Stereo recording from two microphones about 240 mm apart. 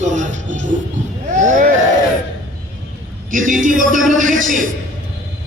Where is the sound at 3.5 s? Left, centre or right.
Right.